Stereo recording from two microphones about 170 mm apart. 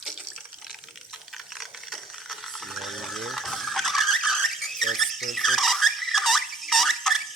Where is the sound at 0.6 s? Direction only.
Centre (ahead or behind).